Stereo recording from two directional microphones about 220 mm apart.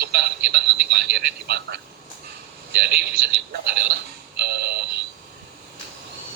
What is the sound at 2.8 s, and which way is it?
Speech, 45° right (ahead or behind).